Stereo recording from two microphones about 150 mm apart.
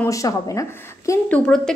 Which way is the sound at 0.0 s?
20° left (ahead or behind).